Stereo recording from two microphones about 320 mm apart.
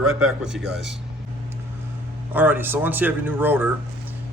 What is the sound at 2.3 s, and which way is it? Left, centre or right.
Speech, centre.